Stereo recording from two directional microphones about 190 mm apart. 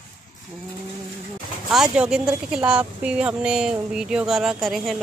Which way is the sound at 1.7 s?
5° right (ahead or behind).